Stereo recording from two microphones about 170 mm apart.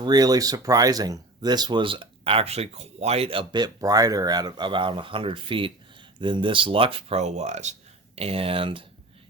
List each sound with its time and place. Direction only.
0.0 s speech: 25° right (ahead or behind)